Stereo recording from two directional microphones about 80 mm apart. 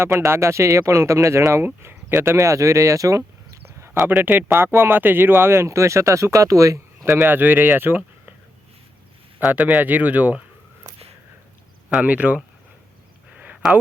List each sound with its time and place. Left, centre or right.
0.0 s speech: right
4.0 s speech: right
9.4 s speech: centre
11.9 s speech: centre
13.3 s a sound: centre